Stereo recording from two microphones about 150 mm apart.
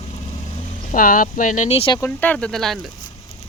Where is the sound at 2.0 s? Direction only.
10° left (ahead or behind).